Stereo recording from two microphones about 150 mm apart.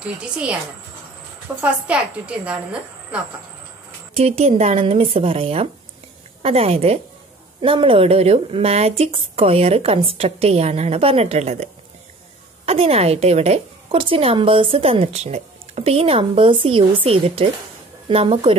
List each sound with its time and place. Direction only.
0.0 s a woman's voice: 10° right (ahead or behind)
1.6 s a woman's voice: 10° right (ahead or behind)
4.1 s a woman's voice: 45° right (ahead or behind)